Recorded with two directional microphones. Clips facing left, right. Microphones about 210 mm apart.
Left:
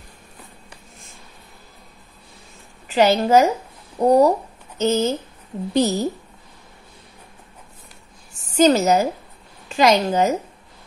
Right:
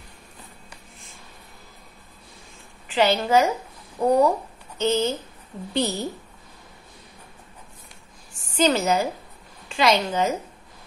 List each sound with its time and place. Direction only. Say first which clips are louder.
2.9 s a woman's voice: left 4 dB; 40° left (ahead or behind)
8.5 s a woman's voice: left 5 dB; 40° left (ahead or behind)